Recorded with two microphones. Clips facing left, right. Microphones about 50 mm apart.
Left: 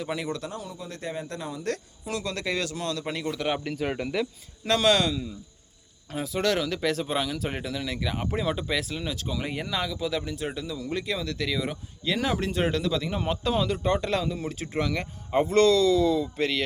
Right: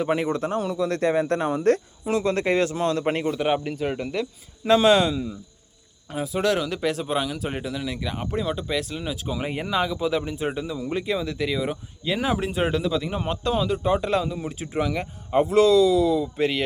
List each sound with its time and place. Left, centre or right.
0.0 s speech: right
0.6 s speech: right
1.7 s speech: right
3.2 s speech: centre
4.6 s speech: centre
6.1 s speech: centre
9.0 s speech: centre